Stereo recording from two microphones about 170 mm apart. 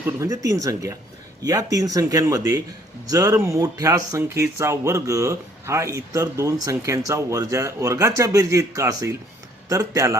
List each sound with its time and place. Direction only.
0.0 s speech: 20° right (ahead or behind)